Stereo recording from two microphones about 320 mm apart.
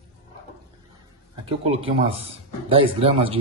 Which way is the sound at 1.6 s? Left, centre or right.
Centre.